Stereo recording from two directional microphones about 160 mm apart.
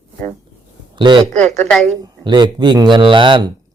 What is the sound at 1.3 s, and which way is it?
Speech, 45° right (ahead or behind).